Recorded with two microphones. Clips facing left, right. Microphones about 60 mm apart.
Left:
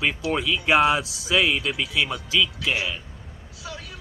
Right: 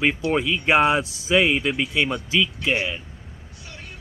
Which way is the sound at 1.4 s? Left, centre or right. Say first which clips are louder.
Right 3 dB; right.